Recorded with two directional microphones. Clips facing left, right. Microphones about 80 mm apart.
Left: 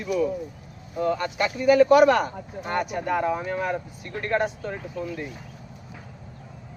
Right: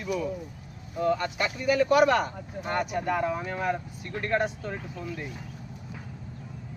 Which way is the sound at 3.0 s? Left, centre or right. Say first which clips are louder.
Left 3 dB; centre.